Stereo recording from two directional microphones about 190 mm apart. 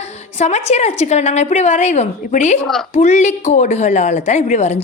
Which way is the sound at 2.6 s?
Centre (ahead or behind).